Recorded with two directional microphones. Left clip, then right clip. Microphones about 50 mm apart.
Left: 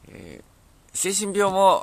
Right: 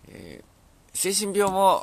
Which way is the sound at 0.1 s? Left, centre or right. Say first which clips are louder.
Left 1 dB; centre.